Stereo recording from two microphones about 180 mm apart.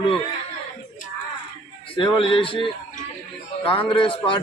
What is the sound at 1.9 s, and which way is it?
A man's voice, 30° left (ahead or behind).